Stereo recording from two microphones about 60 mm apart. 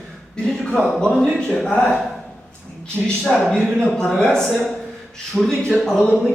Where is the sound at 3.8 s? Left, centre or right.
Centre.